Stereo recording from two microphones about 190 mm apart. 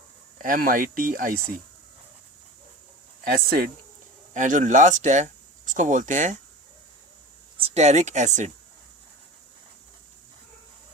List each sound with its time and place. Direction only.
0.4 s speech: 45° right (ahead or behind)
3.2 s speech: 50° right (ahead or behind)
7.6 s speech: 35° right (ahead or behind)